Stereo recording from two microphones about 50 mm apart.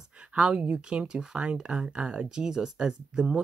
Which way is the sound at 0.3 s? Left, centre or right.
Right.